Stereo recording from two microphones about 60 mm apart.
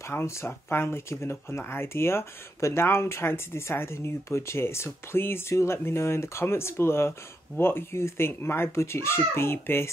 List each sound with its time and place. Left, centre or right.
0.0 s speech: left